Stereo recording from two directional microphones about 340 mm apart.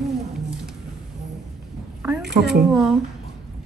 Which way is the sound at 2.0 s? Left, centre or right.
Centre.